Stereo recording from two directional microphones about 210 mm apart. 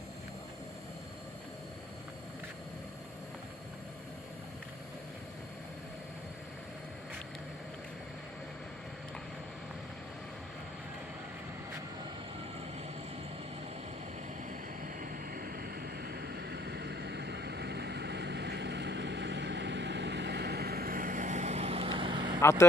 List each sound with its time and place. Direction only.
15.0 s vehicle: 40° right (ahead or behind); by 22.4 s 20° right (ahead or behind)
22.4 s speech: 15° left (ahead or behind)